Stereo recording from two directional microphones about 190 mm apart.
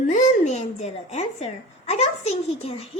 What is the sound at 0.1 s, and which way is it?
A woman's voice, 35° left (ahead or behind).